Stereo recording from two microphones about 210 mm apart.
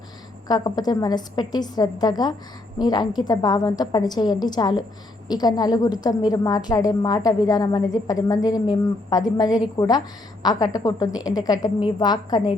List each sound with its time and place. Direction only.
0.4 s a woman's voice: 20° left (ahead or behind)